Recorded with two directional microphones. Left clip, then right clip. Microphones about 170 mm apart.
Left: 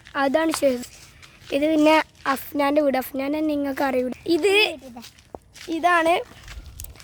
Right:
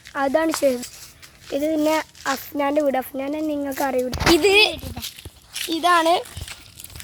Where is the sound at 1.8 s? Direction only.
30° left (ahead or behind).